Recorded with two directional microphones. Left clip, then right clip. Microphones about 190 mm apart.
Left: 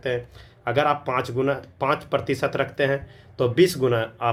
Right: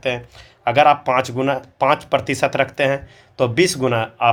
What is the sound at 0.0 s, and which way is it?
Speech, 35° right (ahead or behind).